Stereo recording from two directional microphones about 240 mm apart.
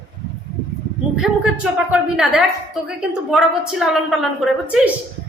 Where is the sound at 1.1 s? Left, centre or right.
Centre.